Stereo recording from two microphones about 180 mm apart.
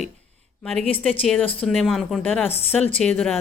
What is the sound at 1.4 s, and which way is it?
Speech, 30° left (ahead or behind).